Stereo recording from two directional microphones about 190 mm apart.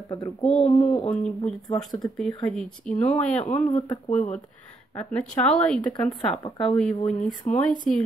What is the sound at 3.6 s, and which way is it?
Speech, 25° left (ahead or behind).